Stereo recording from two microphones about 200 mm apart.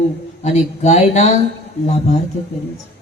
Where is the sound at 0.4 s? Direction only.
35° left (ahead or behind).